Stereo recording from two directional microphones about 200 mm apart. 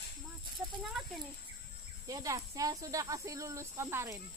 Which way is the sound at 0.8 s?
Centre (ahead or behind).